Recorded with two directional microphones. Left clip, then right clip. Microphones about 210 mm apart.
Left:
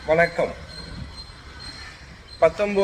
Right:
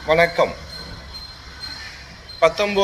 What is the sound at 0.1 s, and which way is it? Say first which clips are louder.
Speech: right 3 dB; 5° left (ahead or behind).